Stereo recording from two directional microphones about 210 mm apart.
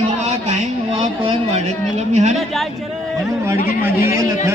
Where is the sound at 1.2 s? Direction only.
30° right (ahead or behind).